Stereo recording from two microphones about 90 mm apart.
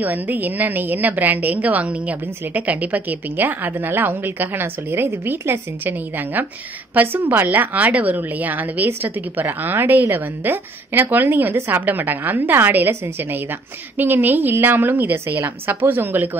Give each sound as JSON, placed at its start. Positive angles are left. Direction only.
{"t": 0.0, "sound": "a woman's voice", "side_deg": -20}